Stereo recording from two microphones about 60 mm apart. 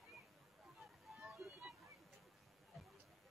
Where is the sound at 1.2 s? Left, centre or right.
Centre.